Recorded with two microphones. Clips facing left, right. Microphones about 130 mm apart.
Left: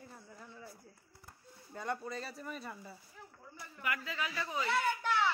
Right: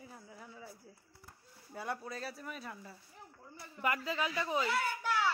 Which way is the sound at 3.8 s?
30° right (ahead or behind).